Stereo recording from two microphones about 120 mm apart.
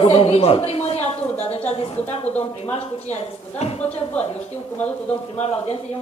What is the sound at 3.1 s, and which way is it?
Speech, 65° left (ahead or behind).